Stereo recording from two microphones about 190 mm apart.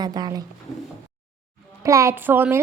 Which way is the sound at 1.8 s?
15° right (ahead or behind).